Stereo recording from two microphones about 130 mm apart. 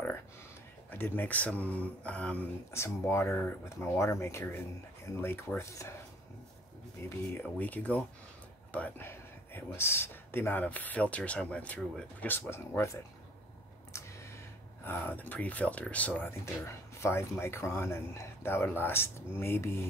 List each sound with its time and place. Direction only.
0.8 s speech: 15° left (ahead or behind)
2.7 s speech: 20° left (ahead or behind)
7.0 s speech: 20° left (ahead or behind)
13.9 s a sound: 20° left (ahead or behind)
14.9 s speech: 15° left (ahead or behind)